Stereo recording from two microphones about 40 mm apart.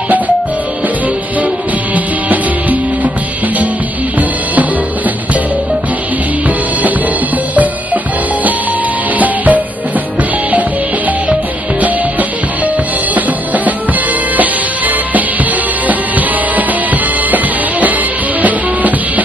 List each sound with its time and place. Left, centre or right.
2.0 s music: right
9.2 s music: right
14.3 s music: right